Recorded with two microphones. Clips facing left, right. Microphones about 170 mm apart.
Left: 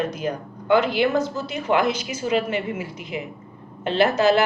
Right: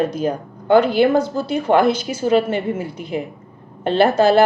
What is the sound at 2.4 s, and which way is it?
Speech, 50° right (ahead or behind).